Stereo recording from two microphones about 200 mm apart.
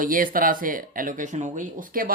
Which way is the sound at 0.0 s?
45° right (ahead or behind).